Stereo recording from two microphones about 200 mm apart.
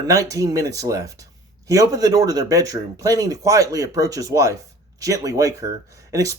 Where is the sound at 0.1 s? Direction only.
15° right (ahead or behind).